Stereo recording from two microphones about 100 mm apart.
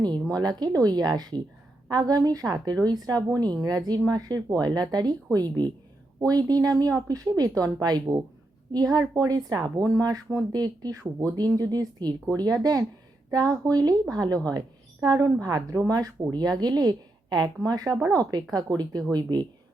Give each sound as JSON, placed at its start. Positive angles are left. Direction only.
{"t": 0.0, "sound": "a woman's voice", "side_deg": -40}